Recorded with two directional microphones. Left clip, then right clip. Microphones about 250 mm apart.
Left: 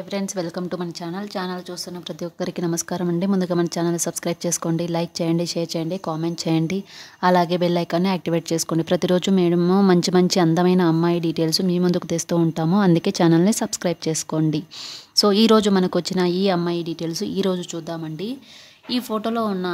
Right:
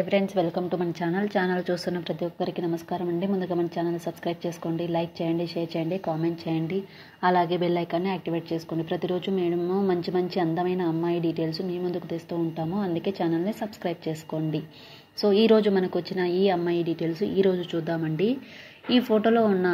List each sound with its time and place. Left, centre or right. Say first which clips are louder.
0.1 s speech: left 2 dB; centre
1.0 s speech: right 3 dB; centre
2.4 s speech: left 6 dB; left
9.6 s speech: left 7 dB; left
9.8 s speech: left 8 dB; left
18.9 s speech: right 3 dB; centre